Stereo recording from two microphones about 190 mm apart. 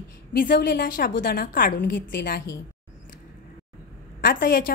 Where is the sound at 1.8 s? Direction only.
60° left (ahead or behind).